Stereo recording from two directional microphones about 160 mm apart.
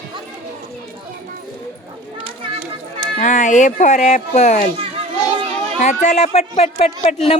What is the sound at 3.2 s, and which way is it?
Speech, 55° left (ahead or behind).